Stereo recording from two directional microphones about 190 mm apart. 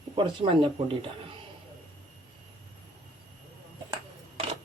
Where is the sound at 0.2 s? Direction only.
25° right (ahead or behind).